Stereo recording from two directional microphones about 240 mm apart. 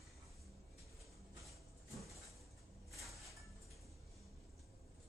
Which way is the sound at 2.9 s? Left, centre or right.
Centre.